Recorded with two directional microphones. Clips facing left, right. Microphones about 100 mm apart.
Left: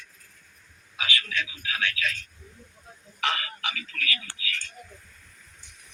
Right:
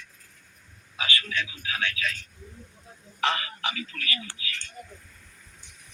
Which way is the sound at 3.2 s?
25° right (ahead or behind).